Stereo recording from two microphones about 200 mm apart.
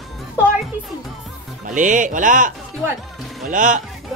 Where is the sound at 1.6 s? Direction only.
40° right (ahead or behind).